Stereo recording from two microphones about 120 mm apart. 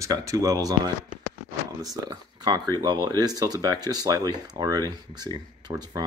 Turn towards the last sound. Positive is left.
turn(degrees=-30)  # may be behind; listen again after turning